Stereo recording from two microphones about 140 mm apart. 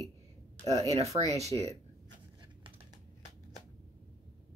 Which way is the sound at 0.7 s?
45° right (ahead or behind).